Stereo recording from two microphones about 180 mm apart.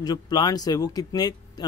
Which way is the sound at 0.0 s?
25° left (ahead or behind).